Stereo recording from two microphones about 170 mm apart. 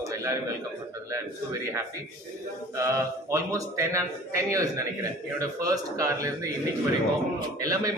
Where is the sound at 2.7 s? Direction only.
15° right (ahead or behind).